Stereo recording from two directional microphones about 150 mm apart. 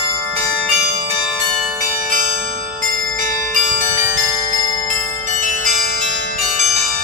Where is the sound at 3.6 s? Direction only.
60° right (ahead or behind).